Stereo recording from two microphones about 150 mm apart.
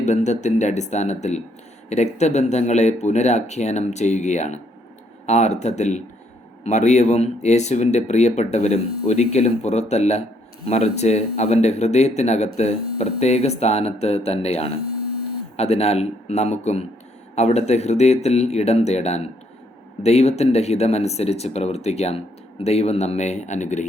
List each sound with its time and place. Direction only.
0.0 s speech: 50° left (ahead or behind)